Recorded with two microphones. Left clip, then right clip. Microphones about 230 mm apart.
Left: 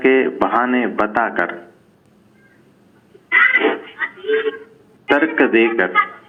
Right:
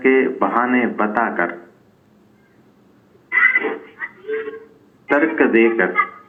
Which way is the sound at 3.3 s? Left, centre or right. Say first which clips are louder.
Left 2 dB; left.